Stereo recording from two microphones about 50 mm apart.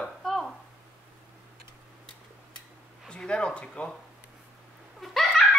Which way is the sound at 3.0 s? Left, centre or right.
Centre.